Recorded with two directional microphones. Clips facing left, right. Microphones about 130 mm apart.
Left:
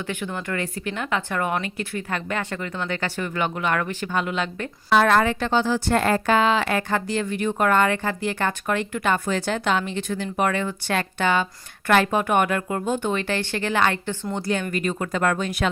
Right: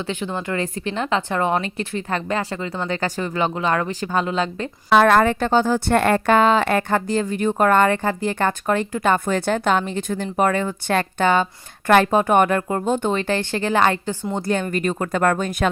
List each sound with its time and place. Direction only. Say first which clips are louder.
0.1 s a woman's voice: right 3 dB; 20° right (ahead or behind)
4.9 s a woman's voice: right 4 dB; 55° right (ahead or behind)
13.4 s a woman's voice: right 3 dB; 25° right (ahead or behind)
14.3 s a woman's voice: right 3 dB; 45° right (ahead or behind)